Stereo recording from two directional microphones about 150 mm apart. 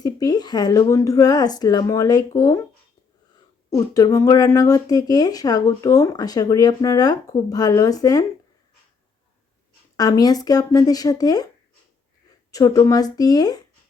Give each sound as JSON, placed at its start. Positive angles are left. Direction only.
{"t": 0.0, "sound": "speech", "side_deg": 25}
{"t": 3.7, "sound": "speech", "side_deg": 25}
{"t": 10.0, "sound": "speech", "side_deg": 25}
{"t": 12.5, "sound": "speech", "side_deg": 25}